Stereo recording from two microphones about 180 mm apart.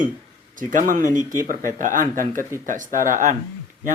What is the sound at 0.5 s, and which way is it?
Speech, 50° right (ahead or behind).